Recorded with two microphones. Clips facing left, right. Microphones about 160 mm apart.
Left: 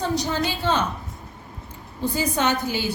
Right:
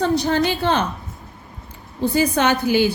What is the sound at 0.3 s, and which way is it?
Speech, 65° right (ahead or behind).